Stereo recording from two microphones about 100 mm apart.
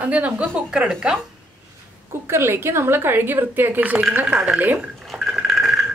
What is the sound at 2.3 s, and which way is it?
Speech, 25° right (ahead or behind).